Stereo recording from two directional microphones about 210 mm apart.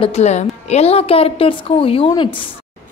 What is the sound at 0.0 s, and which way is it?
A woman's voice, 30° left (ahead or behind).